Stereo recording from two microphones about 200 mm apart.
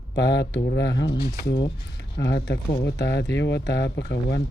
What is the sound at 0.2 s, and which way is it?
Speech, 60° left (ahead or behind).